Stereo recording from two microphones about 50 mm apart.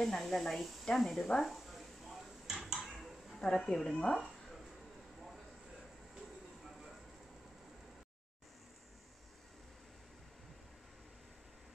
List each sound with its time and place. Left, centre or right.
0.0 s speech: centre
1.5 s a sound: centre
3.3 s speech: centre